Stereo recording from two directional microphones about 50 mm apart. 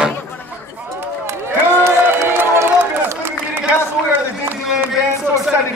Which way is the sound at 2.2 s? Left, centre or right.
Right.